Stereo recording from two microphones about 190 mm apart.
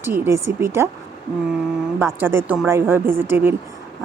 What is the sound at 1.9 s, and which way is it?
Speech, 15° right (ahead or behind).